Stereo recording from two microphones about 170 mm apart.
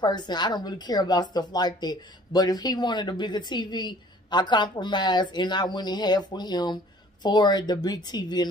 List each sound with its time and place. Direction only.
0.0 s a woman's voice: 25° left (ahead or behind)